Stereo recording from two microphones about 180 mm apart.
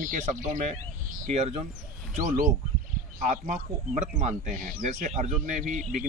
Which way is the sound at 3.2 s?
40° right (ahead or behind).